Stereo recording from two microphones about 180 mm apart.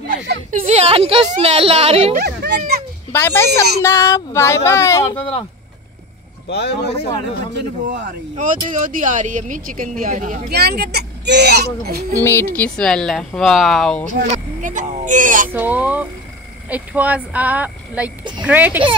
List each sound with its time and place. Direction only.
0.1 s speech: 50° right (ahead or behind)
0.7 s a woman's voice: 35° right (ahead or behind)
2.1 s a sound: 60° right (ahead or behind)
3.1 s speech: 10° left (ahead or behind)
3.4 s speech: 65° right (ahead or behind)
3.8 s speech: 15° left (ahead or behind)
5.1 s speech: 30° left (ahead or behind)
6.5 s speech: 65° left (ahead or behind)
8.4 s speech: 45° right (ahead or behind)
10.5 s speech: 60° right (ahead or behind)
12.2 s speech: 15° left (ahead or behind)
14.3 s speech: 45° right (ahead or behind)
15.5 s speech: 10° right (ahead or behind)